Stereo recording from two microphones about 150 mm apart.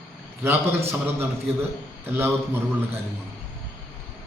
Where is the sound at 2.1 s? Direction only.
15° right (ahead or behind).